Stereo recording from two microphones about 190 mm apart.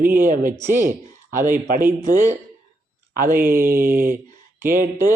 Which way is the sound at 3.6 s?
50° right (ahead or behind).